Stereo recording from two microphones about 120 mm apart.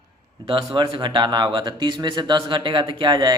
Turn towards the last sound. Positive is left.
turn(degrees=-40)  # may be behind; listen again after turning